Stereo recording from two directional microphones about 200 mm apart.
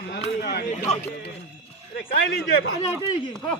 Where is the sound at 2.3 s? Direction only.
55° left (ahead or behind).